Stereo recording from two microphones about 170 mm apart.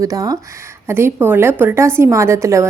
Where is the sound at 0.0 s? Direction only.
20° right (ahead or behind).